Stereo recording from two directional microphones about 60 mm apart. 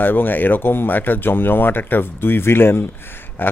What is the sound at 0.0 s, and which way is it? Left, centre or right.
Speech, left.